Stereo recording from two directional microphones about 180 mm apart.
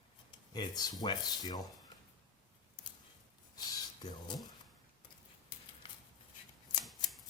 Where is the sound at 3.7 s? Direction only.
20° left (ahead or behind).